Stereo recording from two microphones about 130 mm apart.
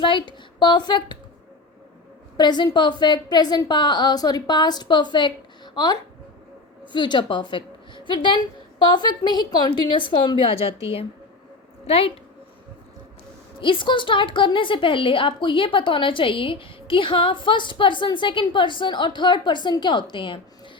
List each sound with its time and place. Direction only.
0.0 s a woman's voice: 40° left (ahead or behind)
2.4 s a woman's voice: 35° left (ahead or behind)
11.9 s a woman's voice: 50° left (ahead or behind)
13.6 s a woman's voice: 40° left (ahead or behind)